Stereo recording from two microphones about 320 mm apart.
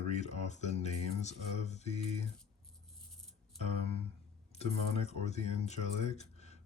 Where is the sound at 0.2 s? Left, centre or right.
Left.